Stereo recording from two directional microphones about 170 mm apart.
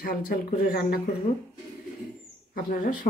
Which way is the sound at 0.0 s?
60° left (ahead or behind).